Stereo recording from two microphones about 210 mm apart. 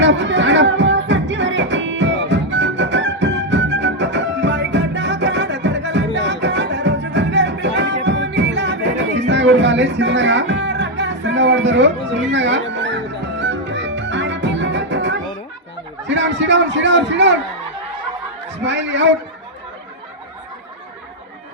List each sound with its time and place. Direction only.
0.0 s music: 60° right (ahead or behind)
16.0 s speech: 60° right (ahead or behind)
18.5 s a man's voice: 60° right (ahead or behind)